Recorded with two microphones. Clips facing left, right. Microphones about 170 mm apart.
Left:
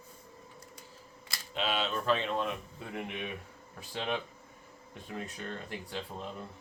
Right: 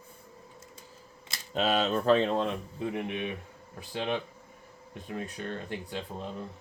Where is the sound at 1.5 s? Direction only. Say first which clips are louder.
Right 6 dB; 40° right (ahead or behind).